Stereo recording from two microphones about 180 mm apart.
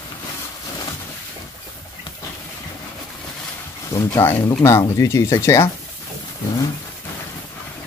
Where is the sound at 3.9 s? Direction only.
15° left (ahead or behind).